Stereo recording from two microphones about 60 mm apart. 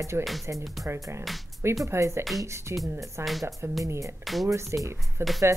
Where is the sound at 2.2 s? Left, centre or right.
Centre.